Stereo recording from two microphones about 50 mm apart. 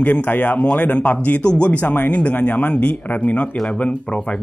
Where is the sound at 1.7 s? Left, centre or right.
Left.